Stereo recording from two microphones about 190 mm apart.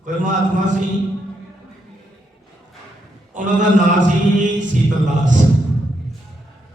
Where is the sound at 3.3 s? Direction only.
40° right (ahead or behind).